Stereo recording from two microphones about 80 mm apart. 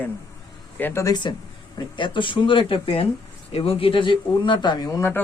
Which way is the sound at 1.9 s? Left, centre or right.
Left.